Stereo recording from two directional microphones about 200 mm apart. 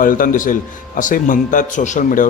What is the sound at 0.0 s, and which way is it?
Speech, 45° left (ahead or behind).